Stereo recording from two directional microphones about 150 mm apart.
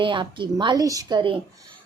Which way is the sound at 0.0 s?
35° right (ahead or behind).